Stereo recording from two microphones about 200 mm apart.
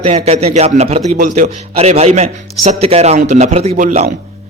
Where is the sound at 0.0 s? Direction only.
30° right (ahead or behind).